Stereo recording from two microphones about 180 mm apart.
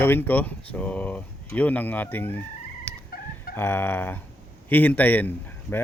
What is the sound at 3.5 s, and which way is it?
A man's voice, 10° left (ahead or behind).